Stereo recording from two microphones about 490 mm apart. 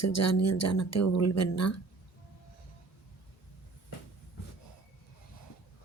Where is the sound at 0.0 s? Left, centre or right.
Left.